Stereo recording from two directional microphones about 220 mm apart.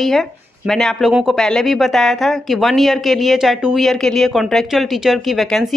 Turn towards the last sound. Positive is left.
turn(degrees=0)  # may be behind; listen again after turning